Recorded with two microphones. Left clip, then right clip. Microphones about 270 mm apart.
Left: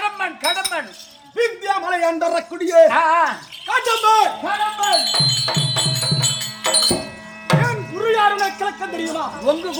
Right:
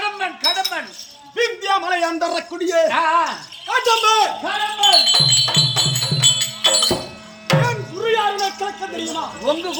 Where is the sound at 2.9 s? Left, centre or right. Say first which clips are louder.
Left 2 dB; centre.